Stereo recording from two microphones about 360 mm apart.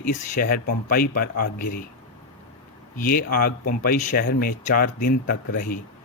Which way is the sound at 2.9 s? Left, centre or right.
Left.